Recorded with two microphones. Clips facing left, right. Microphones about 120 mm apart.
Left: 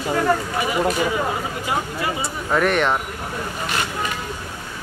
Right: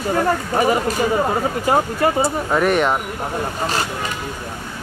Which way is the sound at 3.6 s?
35° right (ahead or behind).